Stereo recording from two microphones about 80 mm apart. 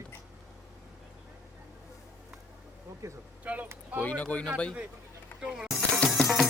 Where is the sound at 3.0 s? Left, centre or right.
Right.